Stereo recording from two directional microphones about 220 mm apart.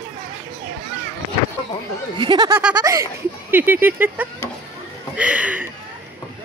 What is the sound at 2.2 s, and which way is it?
Speech, 20° right (ahead or behind).